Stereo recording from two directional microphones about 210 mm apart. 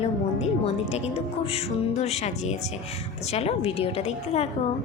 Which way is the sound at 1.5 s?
30° left (ahead or behind).